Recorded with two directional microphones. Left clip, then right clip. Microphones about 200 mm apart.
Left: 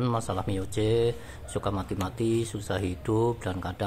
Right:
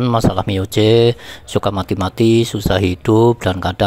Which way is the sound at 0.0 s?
45° right (ahead or behind).